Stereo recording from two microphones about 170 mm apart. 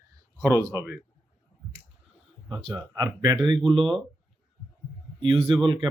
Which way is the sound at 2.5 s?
30° right (ahead or behind).